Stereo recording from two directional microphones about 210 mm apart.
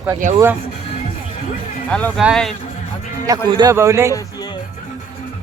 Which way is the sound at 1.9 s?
5° left (ahead or behind).